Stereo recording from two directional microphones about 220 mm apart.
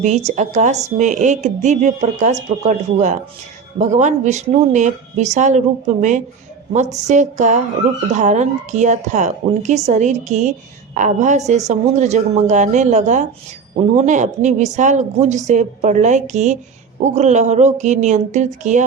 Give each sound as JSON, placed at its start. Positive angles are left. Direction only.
{"t": 0.0, "sound": "a woman's voice", "side_deg": -30}